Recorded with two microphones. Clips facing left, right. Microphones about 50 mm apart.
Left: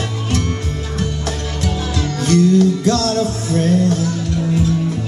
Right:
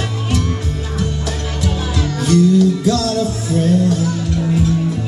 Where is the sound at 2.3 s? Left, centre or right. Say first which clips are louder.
Even; left.